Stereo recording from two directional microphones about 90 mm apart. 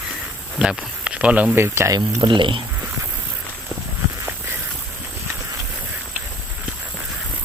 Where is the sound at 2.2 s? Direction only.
65° right (ahead or behind).